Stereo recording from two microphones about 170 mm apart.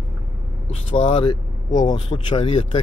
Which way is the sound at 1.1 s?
30° left (ahead or behind).